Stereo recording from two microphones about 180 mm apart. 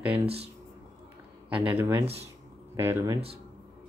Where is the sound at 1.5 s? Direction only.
10° right (ahead or behind).